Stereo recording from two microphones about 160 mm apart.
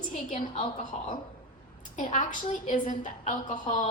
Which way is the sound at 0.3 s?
35° left (ahead or behind).